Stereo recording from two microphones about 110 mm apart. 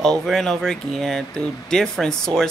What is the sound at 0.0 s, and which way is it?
Speech, 5° left (ahead or behind).